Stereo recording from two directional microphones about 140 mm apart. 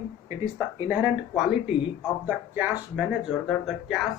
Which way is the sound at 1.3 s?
5° right (ahead or behind).